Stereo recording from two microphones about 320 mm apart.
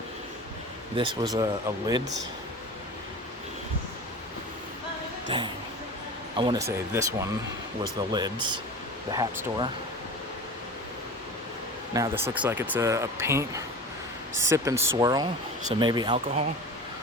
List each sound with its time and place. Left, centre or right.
0.9 s speech: centre
5.3 s speech: centre
11.9 s speech: centre